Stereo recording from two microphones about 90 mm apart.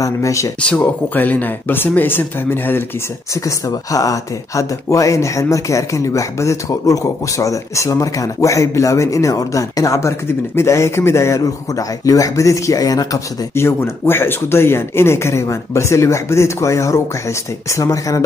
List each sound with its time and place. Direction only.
0.0 s speech: 35° left (ahead or behind)
0.6 s speech: 15° left (ahead or behind)
3.4 s speech: 40° left (ahead or behind)
13.6 s speech: 30° left (ahead or behind)